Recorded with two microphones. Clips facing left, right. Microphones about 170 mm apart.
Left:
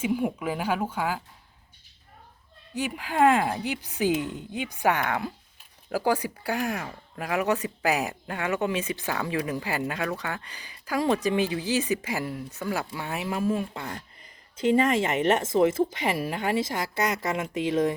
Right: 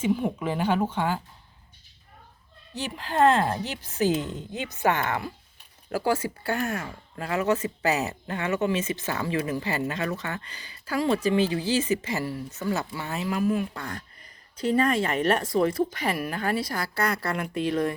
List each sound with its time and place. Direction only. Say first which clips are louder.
0.0 s speech: right 1 dB; 10° left (ahead or behind)
2.7 s a woman's voice: even; 10° left (ahead or behind)